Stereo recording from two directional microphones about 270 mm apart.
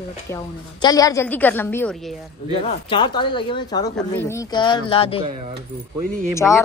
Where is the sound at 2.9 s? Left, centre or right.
Centre.